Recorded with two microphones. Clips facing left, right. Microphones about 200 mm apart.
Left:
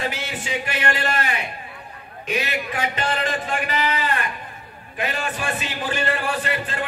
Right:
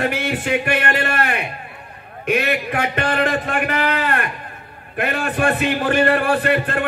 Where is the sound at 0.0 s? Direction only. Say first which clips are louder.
Right 7 dB; 60° right (ahead or behind).